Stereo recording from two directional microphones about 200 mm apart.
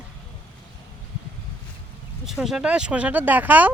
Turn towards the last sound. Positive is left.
turn(degrees=-10)  # may be behind; listen again after turning